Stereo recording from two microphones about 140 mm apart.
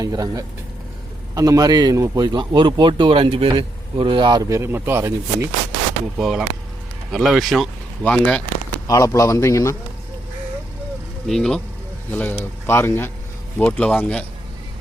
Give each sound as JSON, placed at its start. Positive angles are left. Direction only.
{"t": 0.0, "sound": "a man's voice", "side_deg": -25}
{"t": 6.1, "sound": "speech", "side_deg": 0}
{"t": 8.9, "sound": "a man's voice", "side_deg": 25}
{"t": 11.3, "sound": "speech", "side_deg": 5}
{"t": 12.1, "sound": "speech", "side_deg": 15}